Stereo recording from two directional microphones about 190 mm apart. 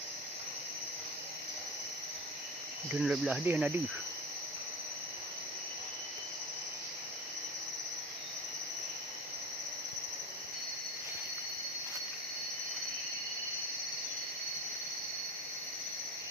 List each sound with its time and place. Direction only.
3.0 s cricket: 5° right (ahead or behind)